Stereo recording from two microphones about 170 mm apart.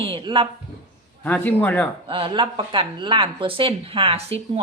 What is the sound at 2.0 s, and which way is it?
Speech, 30° right (ahead or behind).